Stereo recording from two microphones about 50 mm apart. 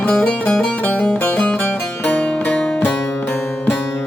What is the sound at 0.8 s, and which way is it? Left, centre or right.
Music, left.